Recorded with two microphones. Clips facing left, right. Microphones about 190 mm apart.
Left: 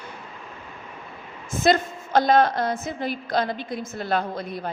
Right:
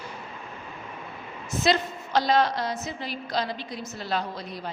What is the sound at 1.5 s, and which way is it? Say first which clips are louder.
A woman's voice: left 4 dB; 50° left (ahead or behind).